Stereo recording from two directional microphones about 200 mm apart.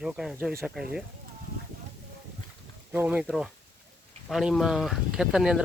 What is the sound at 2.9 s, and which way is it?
Speech, 5° right (ahead or behind).